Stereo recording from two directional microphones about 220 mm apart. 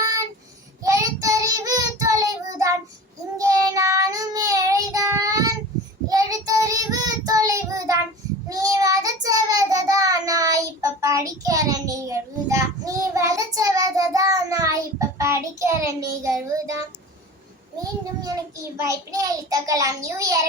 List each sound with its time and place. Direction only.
0.8 s child singing: 15° right (ahead or behind)
18.8 s child singing: 15° right (ahead or behind)